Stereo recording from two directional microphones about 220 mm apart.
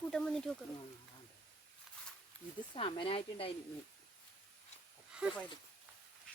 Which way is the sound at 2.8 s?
25° left (ahead or behind).